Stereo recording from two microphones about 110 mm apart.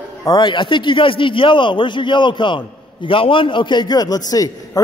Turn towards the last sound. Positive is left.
turn(degrees=35)  # may be behind; listen again after turning